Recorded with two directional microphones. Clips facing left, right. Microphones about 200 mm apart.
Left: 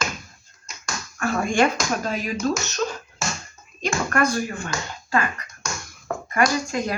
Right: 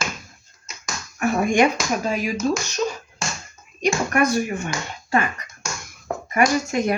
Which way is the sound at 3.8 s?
15° right (ahead or behind).